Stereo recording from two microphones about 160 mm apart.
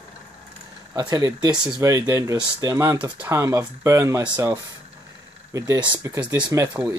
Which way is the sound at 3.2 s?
15° right (ahead or behind).